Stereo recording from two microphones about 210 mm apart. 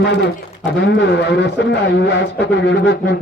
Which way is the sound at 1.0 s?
55° left (ahead or behind).